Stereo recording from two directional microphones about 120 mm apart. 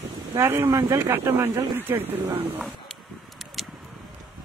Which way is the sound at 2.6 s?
Centre (ahead or behind).